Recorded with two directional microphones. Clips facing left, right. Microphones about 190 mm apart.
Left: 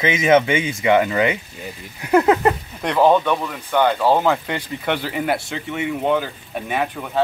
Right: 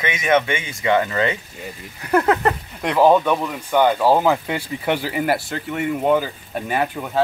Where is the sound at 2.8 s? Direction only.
5° right (ahead or behind).